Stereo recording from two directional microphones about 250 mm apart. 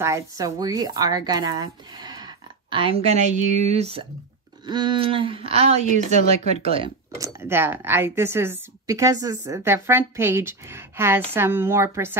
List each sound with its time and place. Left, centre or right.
0.0 s a woman's voice: centre
7.3 s a woman's voice: centre